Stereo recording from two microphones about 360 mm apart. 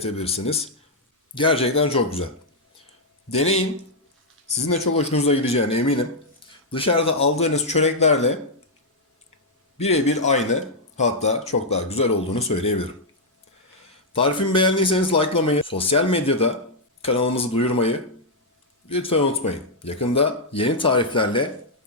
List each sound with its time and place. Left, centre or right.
0.0 s a man's voice: centre
3.3 s a man's voice: left
4.6 s a man's voice: centre
9.7 s a man's voice: centre
14.1 s a man's voice: centre